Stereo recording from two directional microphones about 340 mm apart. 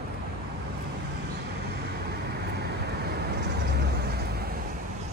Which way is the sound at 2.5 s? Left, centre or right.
Right.